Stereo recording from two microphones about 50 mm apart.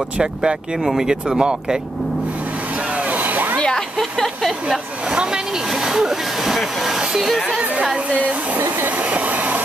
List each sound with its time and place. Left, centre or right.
0.2 s speech: centre
3.1 s a sound: right
3.5 s a sound: centre
4.5 s speech: centre
7.8 s speech: centre
8.5 s hair dryer: right